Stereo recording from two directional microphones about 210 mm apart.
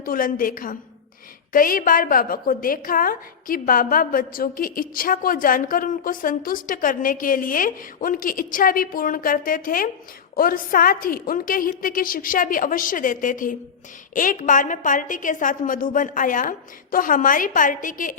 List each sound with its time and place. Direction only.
0.0 s a woman's voice: 40° left (ahead or behind)